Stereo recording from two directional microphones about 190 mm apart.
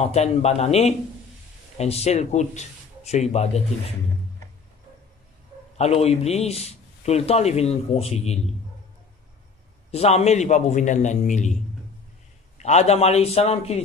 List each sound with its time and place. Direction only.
0.0 s a man's voice: 35° left (ahead or behind)
5.8 s a man's voice: 35° left (ahead or behind)
9.8 s a man's voice: 35° left (ahead or behind)
12.5 s a man's voice: 35° left (ahead or behind)